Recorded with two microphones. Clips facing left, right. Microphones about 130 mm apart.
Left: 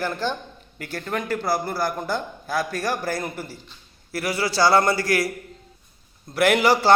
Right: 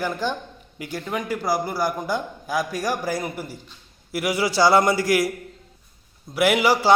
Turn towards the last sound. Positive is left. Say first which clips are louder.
# left 1 dB
turn(degrees=-10)  # may be behind; listen again after turning